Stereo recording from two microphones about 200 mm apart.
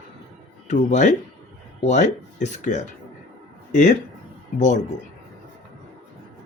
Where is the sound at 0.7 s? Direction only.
40° left (ahead or behind).